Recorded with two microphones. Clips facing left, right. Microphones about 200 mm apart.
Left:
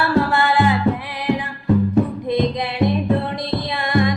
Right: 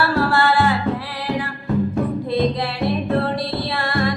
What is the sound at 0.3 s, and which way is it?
Music, 20° left (ahead or behind).